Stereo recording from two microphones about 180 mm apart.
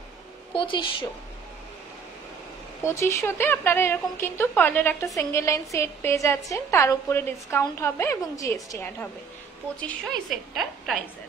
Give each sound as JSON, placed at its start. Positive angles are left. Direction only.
{"t": 0.6, "sound": "a woman's voice", "side_deg": 30}
{"t": 2.8, "sound": "a woman's voice", "side_deg": 15}
{"t": 9.8, "sound": "a woman's voice", "side_deg": 5}